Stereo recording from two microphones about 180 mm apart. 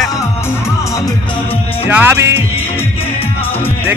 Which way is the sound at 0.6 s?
20° left (ahead or behind).